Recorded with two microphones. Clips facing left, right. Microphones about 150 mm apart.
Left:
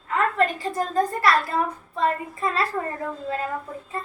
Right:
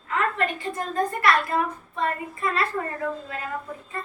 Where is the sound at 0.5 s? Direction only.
35° left (ahead or behind).